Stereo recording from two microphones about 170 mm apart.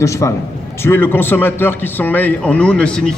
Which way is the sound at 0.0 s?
15° left (ahead or behind).